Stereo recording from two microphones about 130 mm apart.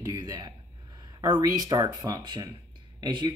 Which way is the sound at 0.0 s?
25° right (ahead or behind).